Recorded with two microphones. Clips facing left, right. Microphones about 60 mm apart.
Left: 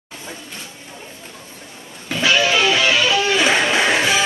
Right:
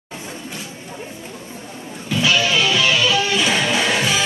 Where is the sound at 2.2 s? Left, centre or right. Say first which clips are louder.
Left 2 dB; left.